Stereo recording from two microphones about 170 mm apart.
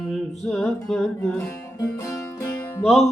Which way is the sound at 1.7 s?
20° left (ahead or behind).